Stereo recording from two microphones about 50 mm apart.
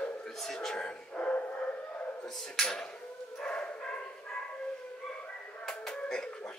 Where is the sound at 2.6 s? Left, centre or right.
Centre.